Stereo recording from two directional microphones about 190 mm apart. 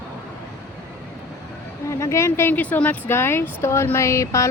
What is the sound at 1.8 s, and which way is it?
Speech, 15° left (ahead or behind).